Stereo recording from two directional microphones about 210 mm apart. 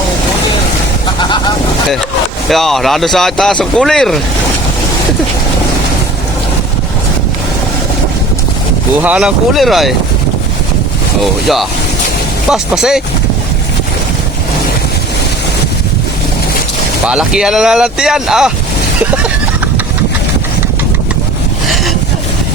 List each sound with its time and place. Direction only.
1.2 s vehicle: 20° left (ahead or behind)
2.5 s speech: centre (ahead or behind)
9.0 s speech: 5° right (ahead or behind)
11.2 s speech: centre (ahead or behind)
17.1 s speech: 5° right (ahead or behind)